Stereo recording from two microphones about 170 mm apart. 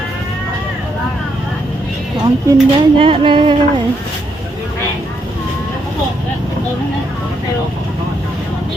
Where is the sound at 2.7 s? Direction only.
30° right (ahead or behind).